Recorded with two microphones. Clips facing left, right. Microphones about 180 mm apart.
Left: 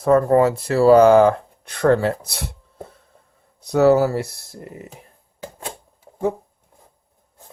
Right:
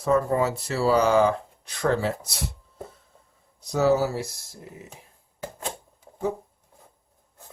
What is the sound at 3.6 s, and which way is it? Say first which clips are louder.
Speech: left 7 dB; 60° left (ahead or behind).